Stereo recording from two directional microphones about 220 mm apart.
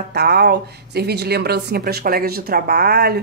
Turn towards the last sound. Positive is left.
turn(degrees=-45)  # may be behind; listen again after turning